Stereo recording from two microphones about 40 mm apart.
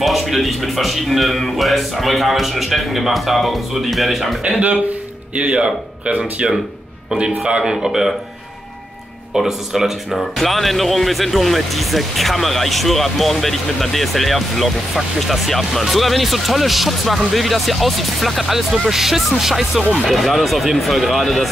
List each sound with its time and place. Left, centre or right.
0.0 s speech: centre
4.5 s speech: right; by 7.7 s centre
7.7 s speech: centre
9.3 s speech: centre